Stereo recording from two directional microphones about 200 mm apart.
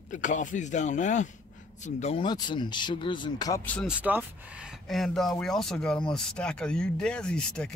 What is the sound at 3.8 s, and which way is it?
Speech, 10° right (ahead or behind).